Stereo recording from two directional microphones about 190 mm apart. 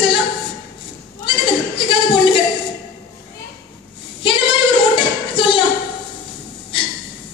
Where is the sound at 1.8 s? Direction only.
25° left (ahead or behind).